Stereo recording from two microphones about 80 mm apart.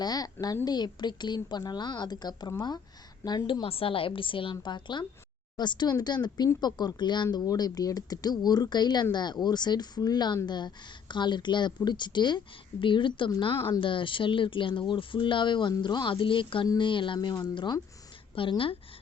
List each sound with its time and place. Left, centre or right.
0.0 s a woman's voice: left
3.2 s a woman's voice: left
7.3 s a woman's voice: left
12.8 s a woman's voice: left
18.3 s speech: left